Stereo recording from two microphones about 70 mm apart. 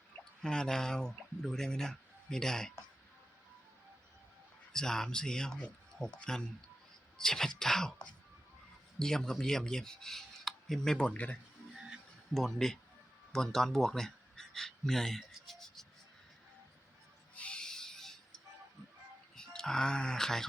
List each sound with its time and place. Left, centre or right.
0.4 s speech: centre
4.7 s speech: centre
9.4 s filing: centre
10.9 s speech: centre
12.3 s speech: centre
17.3 s owl: centre
19.4 s speech: centre